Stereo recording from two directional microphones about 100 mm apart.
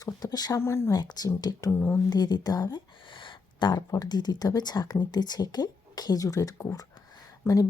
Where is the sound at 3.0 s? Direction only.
55° left (ahead or behind).